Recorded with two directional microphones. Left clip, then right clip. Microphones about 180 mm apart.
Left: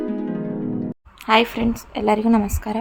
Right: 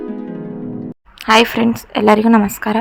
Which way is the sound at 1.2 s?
20° right (ahead or behind).